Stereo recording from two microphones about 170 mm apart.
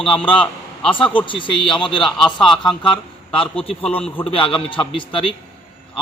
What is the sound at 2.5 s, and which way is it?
Speech, 30° left (ahead or behind).